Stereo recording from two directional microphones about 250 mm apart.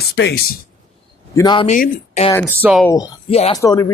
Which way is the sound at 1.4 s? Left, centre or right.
Centre.